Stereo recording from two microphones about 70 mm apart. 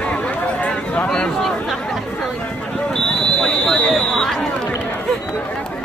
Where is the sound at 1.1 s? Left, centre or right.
Centre.